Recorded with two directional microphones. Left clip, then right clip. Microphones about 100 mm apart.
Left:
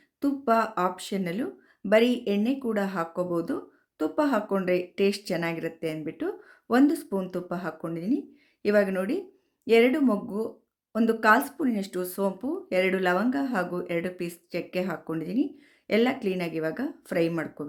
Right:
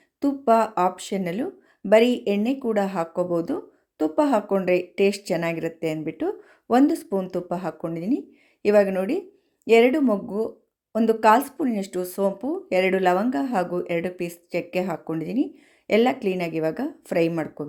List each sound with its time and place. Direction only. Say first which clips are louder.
0.2 s speech: right 5 dB; 25° right (ahead or behind)